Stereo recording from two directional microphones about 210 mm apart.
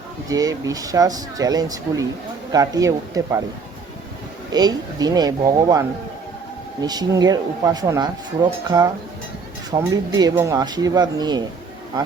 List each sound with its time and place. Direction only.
0.3 s speech: 15° right (ahead or behind)
4.5 s speech: 20° right (ahead or behind)
6.8 s speech: 20° right (ahead or behind)